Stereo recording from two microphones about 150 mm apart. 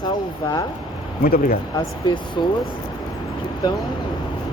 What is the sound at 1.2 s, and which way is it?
Speech, 75° left (ahead or behind).